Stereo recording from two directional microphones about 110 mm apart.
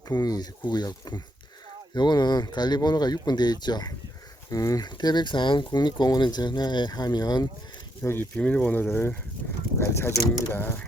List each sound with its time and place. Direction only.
0.1 s speech: 35° left (ahead or behind)
8.0 s speech: 20° left (ahead or behind)